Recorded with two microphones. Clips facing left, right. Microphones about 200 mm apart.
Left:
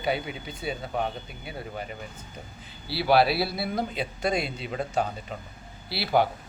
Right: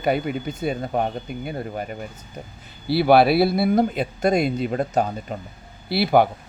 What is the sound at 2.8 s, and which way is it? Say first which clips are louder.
A man's voice: right 6 dB; 55° right (ahead or behind).